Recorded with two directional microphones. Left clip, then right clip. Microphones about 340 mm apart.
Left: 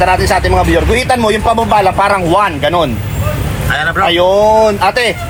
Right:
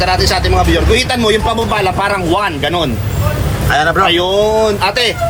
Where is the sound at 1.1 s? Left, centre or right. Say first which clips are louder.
Left 2 dB; centre.